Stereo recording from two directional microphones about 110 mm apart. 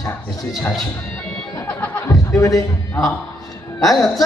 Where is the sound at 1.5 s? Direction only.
20° left (ahead or behind).